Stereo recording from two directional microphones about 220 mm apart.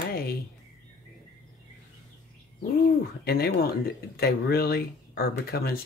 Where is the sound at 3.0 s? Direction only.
45° left (ahead or behind).